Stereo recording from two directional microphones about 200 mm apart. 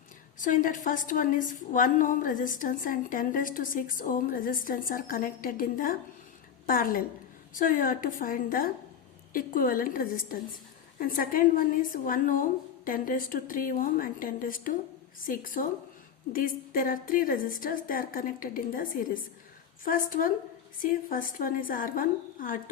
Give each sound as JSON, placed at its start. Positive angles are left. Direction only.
{"t": 0.3, "sound": "a woman's voice", "side_deg": 40}